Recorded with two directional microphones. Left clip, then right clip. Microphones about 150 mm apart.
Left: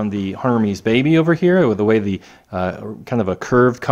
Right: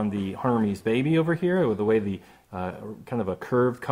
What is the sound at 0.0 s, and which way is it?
Speech, 30° left (ahead or behind).